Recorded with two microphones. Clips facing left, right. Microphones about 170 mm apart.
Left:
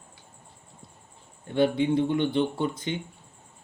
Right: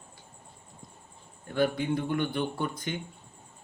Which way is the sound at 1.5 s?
25° left (ahead or behind).